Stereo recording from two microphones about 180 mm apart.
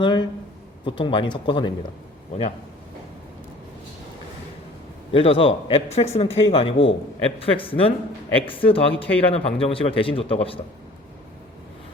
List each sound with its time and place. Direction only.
0.0 s speech: 25° left (ahead or behind)
5.1 s speech: 30° left (ahead or behind)